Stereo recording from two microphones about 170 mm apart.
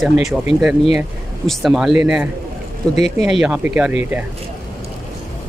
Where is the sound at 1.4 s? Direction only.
Centre (ahead or behind).